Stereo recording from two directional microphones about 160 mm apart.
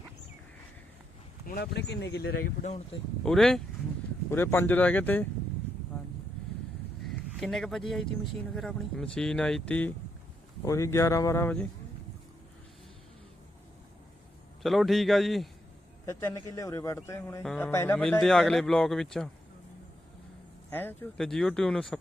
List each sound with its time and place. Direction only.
1.5 s speech: 80° left
3.2 s speech: 5° left (ahead or behind)
4.3 s speech: 15° left (ahead or behind)
7.3 s speech: centre (ahead or behind)
10.7 s speech: 20° left (ahead or behind)
14.6 s speech: centre (ahead or behind)
16.0 s speech: 20° left (ahead or behind)
18.0 s speech: 5° left (ahead or behind)
20.7 s speech: 10° left (ahead or behind)